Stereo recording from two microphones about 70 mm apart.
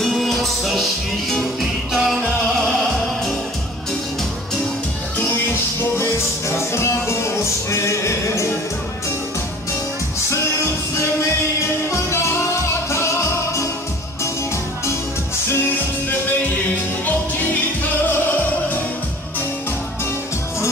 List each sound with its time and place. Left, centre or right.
0.0 s music: centre
6.5 s music: left